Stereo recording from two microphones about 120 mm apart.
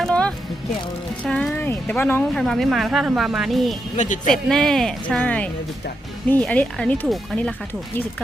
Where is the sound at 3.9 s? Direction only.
90° left.